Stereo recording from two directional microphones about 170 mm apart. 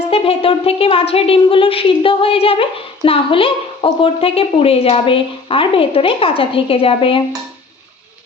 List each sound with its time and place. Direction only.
0.1 s speech: 35° left (ahead or behind)